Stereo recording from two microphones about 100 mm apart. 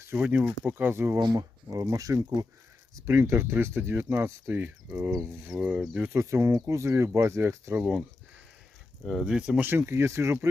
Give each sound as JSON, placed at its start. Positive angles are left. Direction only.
{"t": 0.2, "sound": "speech", "side_deg": -15}
{"t": 1.2, "sound": "speech", "side_deg": -40}
{"t": 2.9, "sound": "speech", "side_deg": -25}
{"t": 6.1, "sound": "speech", "side_deg": -30}
{"t": 9.0, "sound": "speech", "side_deg": -5}
{"t": 9.6, "sound": "speech", "side_deg": -25}